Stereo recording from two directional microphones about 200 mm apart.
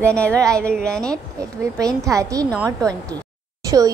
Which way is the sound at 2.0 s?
15° right (ahead or behind).